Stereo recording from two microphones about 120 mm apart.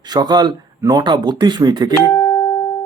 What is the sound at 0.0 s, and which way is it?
Speech, 35° right (ahead or behind).